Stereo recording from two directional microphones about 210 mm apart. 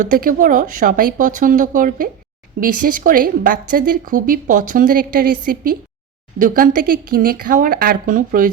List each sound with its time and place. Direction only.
0.0 s a woman's voice: 40° right (ahead or behind)